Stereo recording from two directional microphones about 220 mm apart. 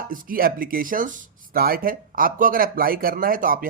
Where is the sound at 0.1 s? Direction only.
40° right (ahead or behind).